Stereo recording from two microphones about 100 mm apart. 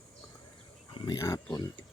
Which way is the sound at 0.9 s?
50° left (ahead or behind).